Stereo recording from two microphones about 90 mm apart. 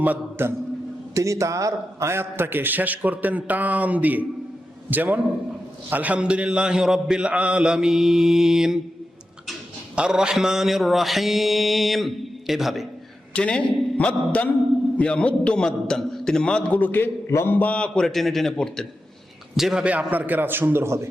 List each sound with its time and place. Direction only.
0.0 s a man's voice: 20° right (ahead or behind)
1.1 s a man's voice: 35° right (ahead or behind); by 8.8 s 5° right (ahead or behind)
9.9 s mantra: 10° right (ahead or behind)
13.3 s a man's voice: 10° left (ahead or behind)
19.5 s a man's voice: 5° right (ahead or behind); by 21.1 s 30° right (ahead or behind)